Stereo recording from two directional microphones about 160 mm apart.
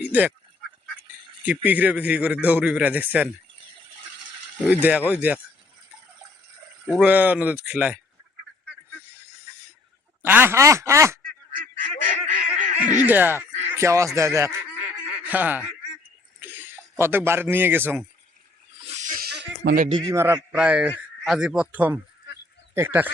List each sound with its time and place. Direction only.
0.0 s speech: 10° right (ahead or behind)
1.5 s a man's voice: 10° right (ahead or behind)
4.7 s a man's voice: 10° right (ahead or behind)
6.8 s a man's voice: 10° right (ahead or behind)
9.0 s a sound: 15° right (ahead or behind)
10.2 s a man's voice: 15° right (ahead or behind)
12.3 s goose: 50° right (ahead or behind)
13.1 s speech: 10° right (ahead or behind)
14.2 s honk: 15° right (ahead or behind)
16.4 s a man's voice: 10° right (ahead or behind)
18.8 s snake: 45° right (ahead or behind); by 19.9 s 70° right (ahead or behind)
19.9 s a man's voice: 30° right (ahead or behind)
20.1 s a man's voice: 15° right (ahead or behind)